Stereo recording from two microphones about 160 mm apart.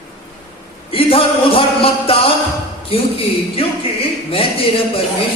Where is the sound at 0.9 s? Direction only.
35° left (ahead or behind).